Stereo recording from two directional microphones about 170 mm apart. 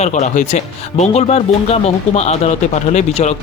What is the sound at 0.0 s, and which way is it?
Speech, 45° left (ahead or behind).